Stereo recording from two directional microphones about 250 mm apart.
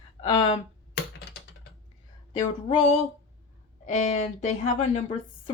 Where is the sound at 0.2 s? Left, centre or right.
Centre.